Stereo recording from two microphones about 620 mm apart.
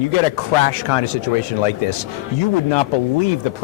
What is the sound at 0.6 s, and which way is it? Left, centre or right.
Speech, left.